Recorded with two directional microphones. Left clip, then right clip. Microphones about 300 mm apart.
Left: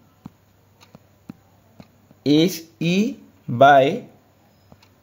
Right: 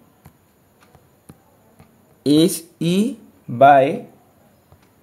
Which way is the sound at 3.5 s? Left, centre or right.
Left.